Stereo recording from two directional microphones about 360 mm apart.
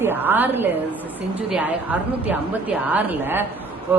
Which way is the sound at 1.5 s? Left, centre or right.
Centre.